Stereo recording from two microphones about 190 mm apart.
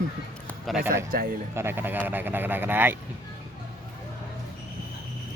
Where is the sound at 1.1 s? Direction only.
45° right (ahead or behind).